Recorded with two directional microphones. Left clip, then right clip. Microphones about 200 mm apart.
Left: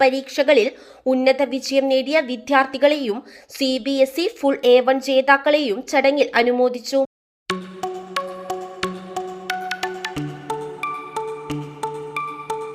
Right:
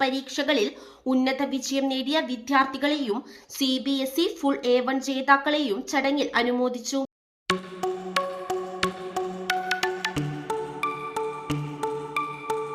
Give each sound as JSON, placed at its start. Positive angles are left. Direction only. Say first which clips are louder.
{"t": 0.0, "sound": "speech", "louder": "left 9 dB", "side_deg": 25}
{"t": 7.4, "sound": "music", "louder": "left 1 dB", "side_deg": 0}